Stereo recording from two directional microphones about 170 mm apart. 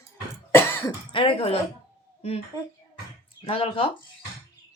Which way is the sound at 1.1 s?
30° left (ahead or behind).